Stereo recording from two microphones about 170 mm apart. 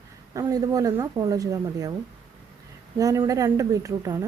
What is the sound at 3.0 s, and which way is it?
A woman's voice, 20° right (ahead or behind).